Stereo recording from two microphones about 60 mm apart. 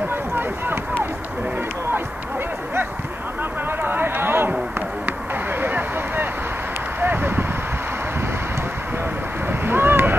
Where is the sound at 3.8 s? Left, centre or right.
Right.